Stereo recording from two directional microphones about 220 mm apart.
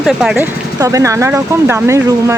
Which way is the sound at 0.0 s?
Centre (ahead or behind).